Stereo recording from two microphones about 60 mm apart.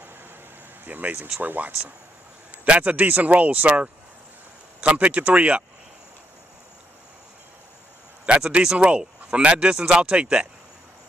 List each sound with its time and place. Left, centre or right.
0.8 s speech: right
8.3 s speech: centre